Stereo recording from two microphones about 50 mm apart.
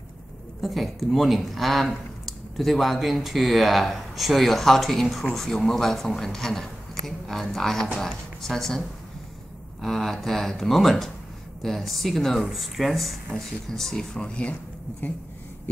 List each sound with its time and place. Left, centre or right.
0.6 s speech: centre
14.2 s speech: left